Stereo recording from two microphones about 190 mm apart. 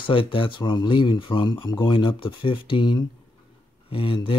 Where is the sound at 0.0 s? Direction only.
25° left (ahead or behind).